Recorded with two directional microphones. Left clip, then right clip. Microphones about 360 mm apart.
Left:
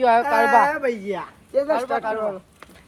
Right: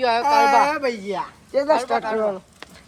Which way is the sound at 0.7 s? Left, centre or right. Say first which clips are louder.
Even; centre.